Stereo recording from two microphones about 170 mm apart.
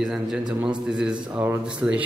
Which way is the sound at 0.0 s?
5° right (ahead or behind).